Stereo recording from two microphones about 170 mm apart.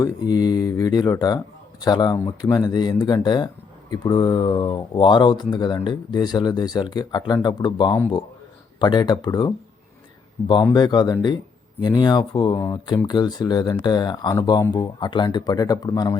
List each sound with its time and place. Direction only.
0.0 s speech: 20° left (ahead or behind)
10.5 s speech: 25° left (ahead or behind)